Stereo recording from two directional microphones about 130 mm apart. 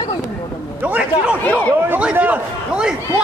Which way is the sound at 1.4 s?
15° left (ahead or behind).